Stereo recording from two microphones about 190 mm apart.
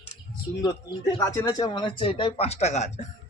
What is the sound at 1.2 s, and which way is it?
Speech, 20° left (ahead or behind).